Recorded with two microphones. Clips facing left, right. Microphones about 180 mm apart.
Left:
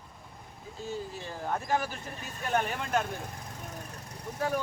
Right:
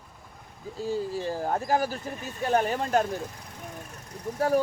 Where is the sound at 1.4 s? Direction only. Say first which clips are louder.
Right 3 dB; 40° right (ahead or behind).